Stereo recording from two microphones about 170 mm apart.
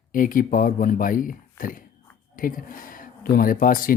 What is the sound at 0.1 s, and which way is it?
Speech, 55° left (ahead or behind).